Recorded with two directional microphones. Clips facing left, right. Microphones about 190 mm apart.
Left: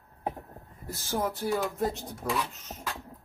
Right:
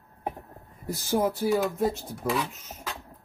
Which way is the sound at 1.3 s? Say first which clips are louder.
Right 4 dB; centre (ahead or behind).